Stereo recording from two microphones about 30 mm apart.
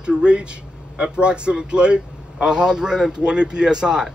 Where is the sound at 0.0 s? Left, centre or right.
Right.